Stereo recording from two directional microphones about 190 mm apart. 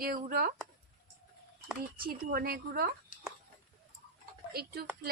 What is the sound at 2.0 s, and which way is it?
Speech, 50° right (ahead or behind).